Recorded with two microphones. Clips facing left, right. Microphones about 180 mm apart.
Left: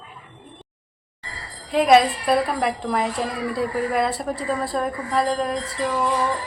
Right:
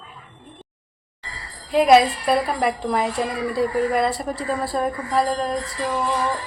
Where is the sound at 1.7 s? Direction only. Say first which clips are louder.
Right 1 dB; centre (ahead or behind).